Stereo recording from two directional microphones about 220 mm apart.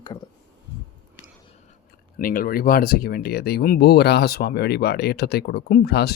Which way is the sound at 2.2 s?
40° left (ahead or behind).